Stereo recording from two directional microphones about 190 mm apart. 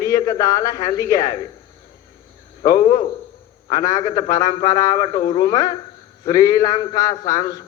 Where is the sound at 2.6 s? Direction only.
20° left (ahead or behind).